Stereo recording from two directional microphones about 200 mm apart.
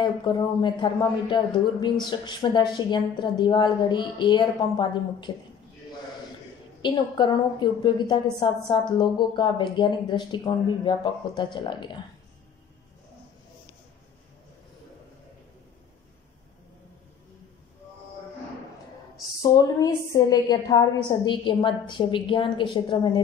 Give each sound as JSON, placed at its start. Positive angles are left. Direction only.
{"t": 0.0, "sound": "a woman's voice", "side_deg": 20}
{"t": 6.8, "sound": "a woman's voice", "side_deg": 25}
{"t": 19.5, "sound": "a woman's voice", "side_deg": 20}